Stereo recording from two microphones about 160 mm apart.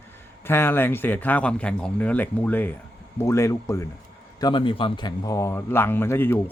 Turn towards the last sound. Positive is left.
turn(degrees=15)  # may be behind; listen again after turning